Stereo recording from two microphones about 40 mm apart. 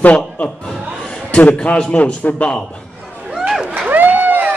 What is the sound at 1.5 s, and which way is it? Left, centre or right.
Speech, left.